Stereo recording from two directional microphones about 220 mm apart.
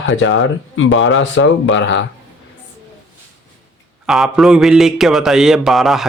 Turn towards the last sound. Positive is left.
turn(degrees=0)  # may be behind; listen again after turning